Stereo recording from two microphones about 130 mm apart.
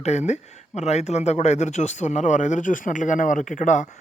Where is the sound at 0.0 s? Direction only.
60° left (ahead or behind); by 3.8 s 80° left.